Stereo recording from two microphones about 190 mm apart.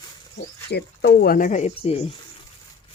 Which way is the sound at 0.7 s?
60° left (ahead or behind).